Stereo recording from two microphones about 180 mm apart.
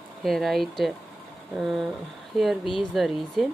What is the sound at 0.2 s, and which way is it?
Speech, centre (ahead or behind).